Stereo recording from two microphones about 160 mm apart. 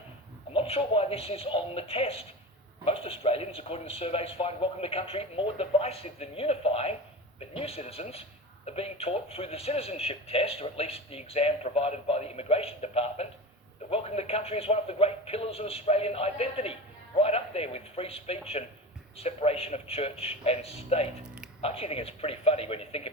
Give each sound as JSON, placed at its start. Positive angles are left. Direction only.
{"t": 0.5, "sound": "a man's voice", "side_deg": 35}